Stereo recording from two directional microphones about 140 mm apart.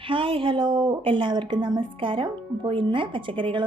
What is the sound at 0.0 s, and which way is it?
A woman's voice, 40° right (ahead or behind).